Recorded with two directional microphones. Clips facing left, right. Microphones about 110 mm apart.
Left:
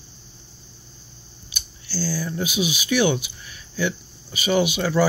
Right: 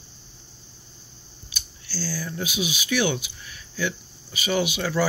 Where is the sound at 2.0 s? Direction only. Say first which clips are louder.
Left 4 dB; 20° left (ahead or behind).